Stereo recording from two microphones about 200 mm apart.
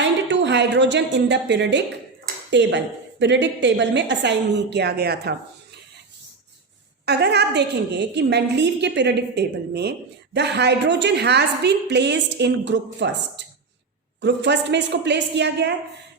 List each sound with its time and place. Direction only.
0.0 s a sound: 65° right (ahead or behind)
2.2 s speech: 60° right (ahead or behind)
7.0 s speech: 55° right (ahead or behind)